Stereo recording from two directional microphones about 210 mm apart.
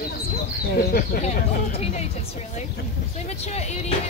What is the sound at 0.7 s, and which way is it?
Speech, 40° left (ahead or behind).